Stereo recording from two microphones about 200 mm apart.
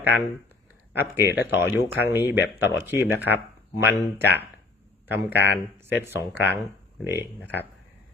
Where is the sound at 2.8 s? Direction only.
10° right (ahead or behind).